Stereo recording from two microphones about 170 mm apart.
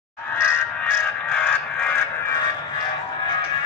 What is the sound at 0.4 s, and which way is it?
Music, 15° left (ahead or behind).